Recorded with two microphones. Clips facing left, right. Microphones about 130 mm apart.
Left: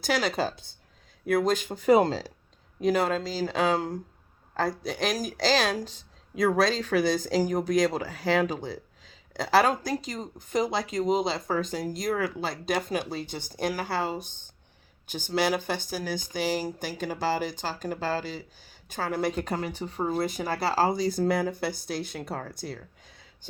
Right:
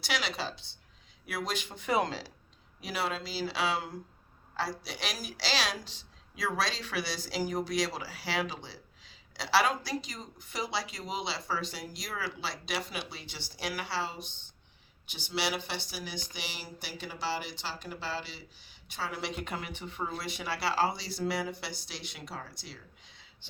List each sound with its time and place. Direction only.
0.0 s a woman's voice: 45° left (ahead or behind)
0.5 s speech: 25° right (ahead or behind)
1.3 s a woman's voice: 45° left (ahead or behind)